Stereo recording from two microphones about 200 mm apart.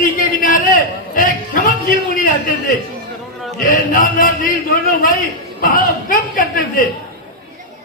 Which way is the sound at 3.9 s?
45° left (ahead or behind).